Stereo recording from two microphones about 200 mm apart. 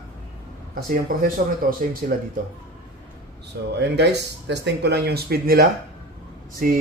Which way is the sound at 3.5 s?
60° right (ahead or behind).